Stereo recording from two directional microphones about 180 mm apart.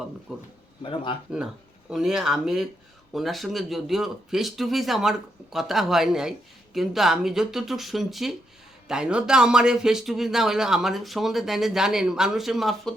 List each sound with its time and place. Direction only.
0.3 s speech: 5° right (ahead or behind)
0.8 s speech: 30° left (ahead or behind)
1.9 s speech: centre (ahead or behind)